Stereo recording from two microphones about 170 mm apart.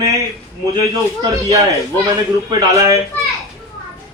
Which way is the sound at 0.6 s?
20° right (ahead or behind).